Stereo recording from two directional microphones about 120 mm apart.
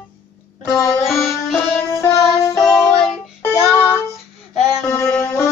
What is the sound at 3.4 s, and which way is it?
Music, 15° left (ahead or behind).